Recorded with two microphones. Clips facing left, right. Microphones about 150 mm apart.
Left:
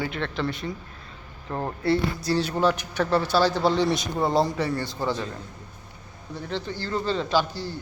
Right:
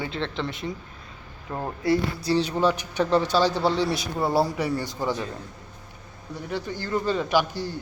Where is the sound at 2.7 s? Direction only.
15° right (ahead or behind).